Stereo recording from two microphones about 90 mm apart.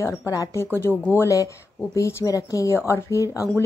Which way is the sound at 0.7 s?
25° left (ahead or behind).